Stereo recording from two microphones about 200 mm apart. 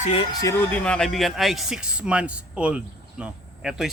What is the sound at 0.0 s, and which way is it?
Speech, 30° left (ahead or behind).